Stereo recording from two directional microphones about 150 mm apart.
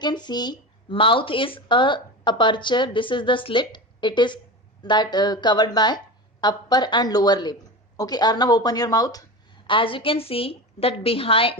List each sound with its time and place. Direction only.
0.0 s speech: 30° left (ahead or behind)
9.6 s speech: 35° left (ahead or behind)